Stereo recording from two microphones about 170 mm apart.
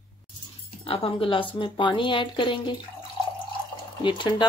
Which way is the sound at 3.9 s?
25° left (ahead or behind).